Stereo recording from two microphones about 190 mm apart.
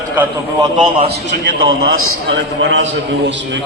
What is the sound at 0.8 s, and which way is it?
Speech, 30° right (ahead or behind).